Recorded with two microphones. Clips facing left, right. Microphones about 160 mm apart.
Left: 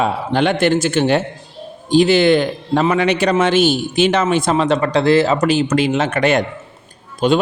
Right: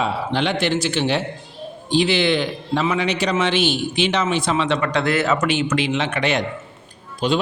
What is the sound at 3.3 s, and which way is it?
A man's voice, 45° left (ahead or behind).